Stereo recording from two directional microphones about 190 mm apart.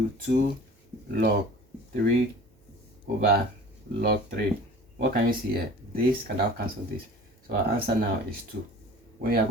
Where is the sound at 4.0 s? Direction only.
45° right (ahead or behind).